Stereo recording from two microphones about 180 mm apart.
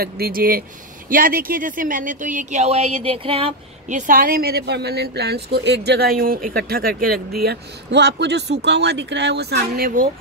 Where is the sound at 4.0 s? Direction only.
50° right (ahead or behind).